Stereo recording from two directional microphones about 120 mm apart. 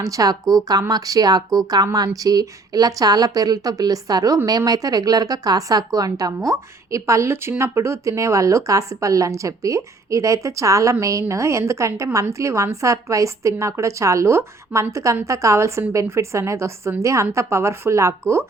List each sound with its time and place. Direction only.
0.0 s a woman's voice: 30° right (ahead or behind)